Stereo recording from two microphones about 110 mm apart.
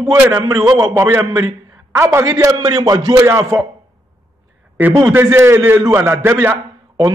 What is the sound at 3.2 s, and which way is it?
Speech, 25° right (ahead or behind).